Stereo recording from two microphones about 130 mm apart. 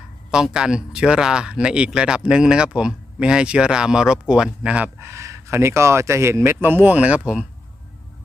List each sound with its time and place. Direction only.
0.3 s speech: 5° right (ahead or behind)